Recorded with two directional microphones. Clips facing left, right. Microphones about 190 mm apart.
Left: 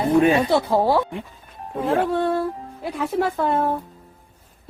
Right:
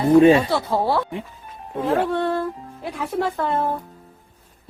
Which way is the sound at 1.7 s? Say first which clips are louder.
Even; centre (ahead or behind).